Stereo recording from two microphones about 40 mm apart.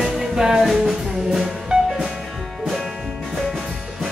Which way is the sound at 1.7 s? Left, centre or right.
Right.